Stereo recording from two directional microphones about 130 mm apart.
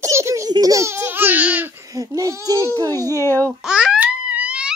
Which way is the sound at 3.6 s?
5° right (ahead or behind).